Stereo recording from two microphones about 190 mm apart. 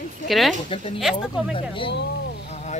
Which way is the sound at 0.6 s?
30° left (ahead or behind).